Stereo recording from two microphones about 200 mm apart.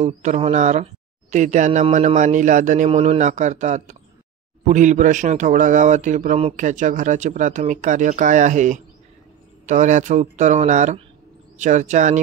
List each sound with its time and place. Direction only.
0.0 s a man's voice: 35° right (ahead or behind)